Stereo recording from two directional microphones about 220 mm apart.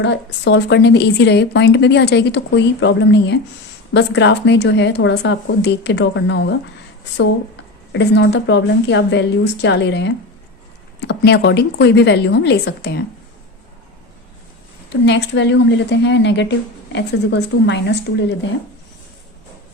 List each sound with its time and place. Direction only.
0.0 s speech: 50° left (ahead or behind)
7.9 s speech: 50° left (ahead or behind)
14.8 s speech: 55° left (ahead or behind)